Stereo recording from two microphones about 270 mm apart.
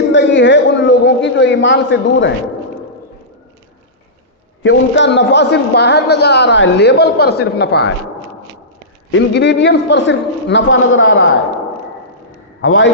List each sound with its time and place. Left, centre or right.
0.1 s a sound: left
4.6 s a man's voice: left
9.1 s a man's voice: left
12.6 s a man's voice: left